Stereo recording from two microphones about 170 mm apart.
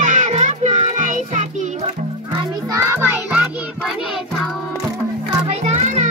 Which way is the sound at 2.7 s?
15° right (ahead or behind).